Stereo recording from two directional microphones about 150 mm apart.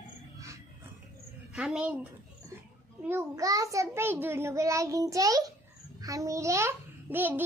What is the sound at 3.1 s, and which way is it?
A child's voice, 20° right (ahead or behind).